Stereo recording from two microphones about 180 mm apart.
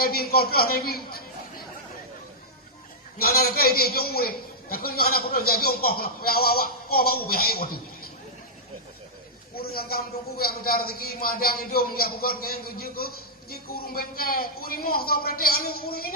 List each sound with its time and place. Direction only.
0.0 s a man's voice: 55° left (ahead or behind)
3.2 s a man's voice: 55° left (ahead or behind)
9.6 s a man's voice: 55° left (ahead or behind)